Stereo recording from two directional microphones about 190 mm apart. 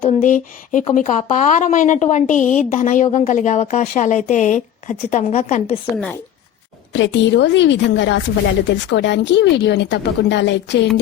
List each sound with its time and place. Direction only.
0.0 s speech: 40° left (ahead or behind)
6.9 s a woman's voice: 70° left (ahead or behind)